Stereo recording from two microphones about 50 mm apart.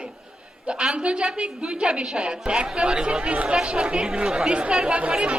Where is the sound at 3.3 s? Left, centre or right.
Right.